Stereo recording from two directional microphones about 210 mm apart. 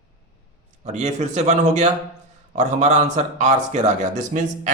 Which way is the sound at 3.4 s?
35° right (ahead or behind).